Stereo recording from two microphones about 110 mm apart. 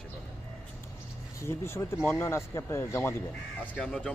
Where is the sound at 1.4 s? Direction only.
20° left (ahead or behind).